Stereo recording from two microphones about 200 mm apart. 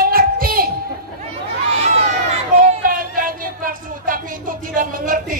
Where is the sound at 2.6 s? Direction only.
45° right (ahead or behind).